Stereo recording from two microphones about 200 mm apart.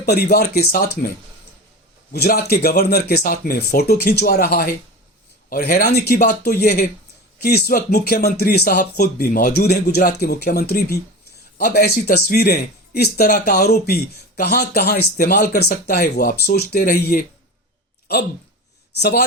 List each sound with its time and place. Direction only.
0.0 s a man's voice: 55° left (ahead or behind)
2.1 s a man's voice: 50° left (ahead or behind)
18.9 s a man's voice: 55° left (ahead or behind)